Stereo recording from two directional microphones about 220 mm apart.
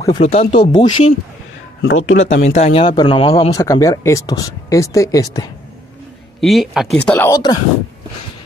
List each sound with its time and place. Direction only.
0.2 s speech: 30° left (ahead or behind)
1.8 s speech: 55° left (ahead or behind)
2.4 s speech: 30° left (ahead or behind); by 5.5 s 15° left (ahead or behind)
6.4 s speech: centre (ahead or behind)
7.1 s speech: 10° left (ahead or behind)